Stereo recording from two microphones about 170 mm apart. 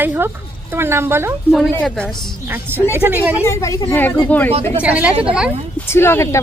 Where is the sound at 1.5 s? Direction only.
5° left (ahead or behind).